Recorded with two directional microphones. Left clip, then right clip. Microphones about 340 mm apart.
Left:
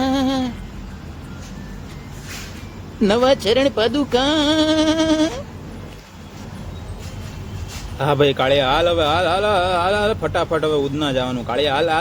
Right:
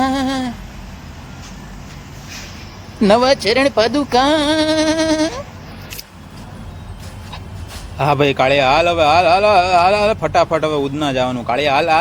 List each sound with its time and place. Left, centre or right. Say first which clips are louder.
0.0 s a sound: right 2 dB; centre
3.0 s a man's voice: right 3 dB; centre
7.9 s a man's voice: right 2 dB; centre